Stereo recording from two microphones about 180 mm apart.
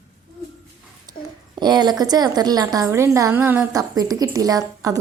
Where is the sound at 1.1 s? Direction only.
25° right (ahead or behind).